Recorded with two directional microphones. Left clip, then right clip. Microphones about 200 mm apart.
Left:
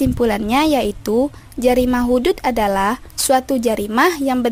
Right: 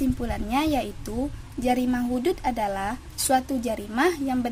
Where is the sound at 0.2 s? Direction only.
50° left (ahead or behind).